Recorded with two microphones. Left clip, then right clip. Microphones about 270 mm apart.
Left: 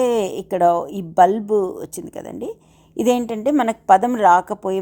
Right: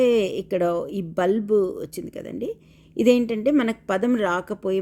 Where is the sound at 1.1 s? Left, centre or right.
Centre.